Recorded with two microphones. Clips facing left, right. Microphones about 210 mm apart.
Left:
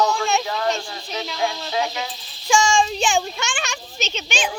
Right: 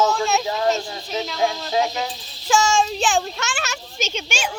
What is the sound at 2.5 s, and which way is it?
A child's voice, 5° right (ahead or behind).